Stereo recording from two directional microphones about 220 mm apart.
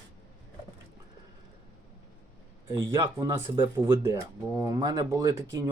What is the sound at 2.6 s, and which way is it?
Speech, 10° right (ahead or behind).